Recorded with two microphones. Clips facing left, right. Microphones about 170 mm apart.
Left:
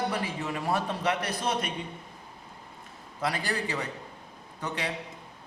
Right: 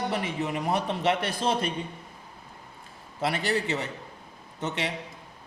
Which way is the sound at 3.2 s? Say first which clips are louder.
Right 3 dB; 25° right (ahead or behind).